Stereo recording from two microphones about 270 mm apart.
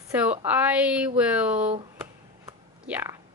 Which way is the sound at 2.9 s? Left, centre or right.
Centre.